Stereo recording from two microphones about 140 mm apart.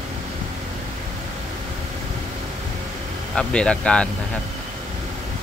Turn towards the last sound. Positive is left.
turn(degrees=5)  # may be behind; listen again after turning